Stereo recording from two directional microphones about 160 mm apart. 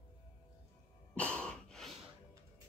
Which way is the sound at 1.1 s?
10° left (ahead or behind).